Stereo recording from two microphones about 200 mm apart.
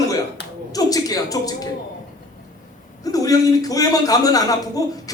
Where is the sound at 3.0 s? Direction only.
20° left (ahead or behind).